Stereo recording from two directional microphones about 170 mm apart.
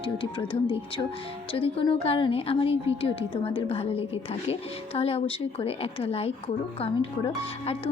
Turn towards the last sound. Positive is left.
turn(degrees=30)  # may be behind; listen again after turning